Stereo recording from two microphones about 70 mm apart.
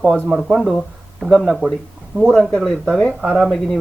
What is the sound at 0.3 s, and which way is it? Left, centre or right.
Speech, centre.